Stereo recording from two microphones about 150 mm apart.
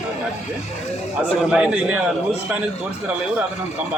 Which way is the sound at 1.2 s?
5° right (ahead or behind).